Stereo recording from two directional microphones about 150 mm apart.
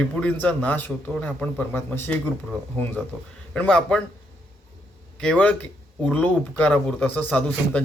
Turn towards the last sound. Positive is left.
turn(degrees=10)  # may be behind; listen again after turning